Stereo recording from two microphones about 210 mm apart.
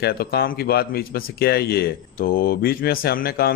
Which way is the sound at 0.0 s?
45° left (ahead or behind).